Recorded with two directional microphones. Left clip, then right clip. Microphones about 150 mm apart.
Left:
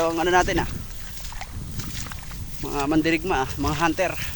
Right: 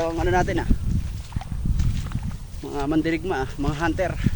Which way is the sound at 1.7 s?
60° left (ahead or behind).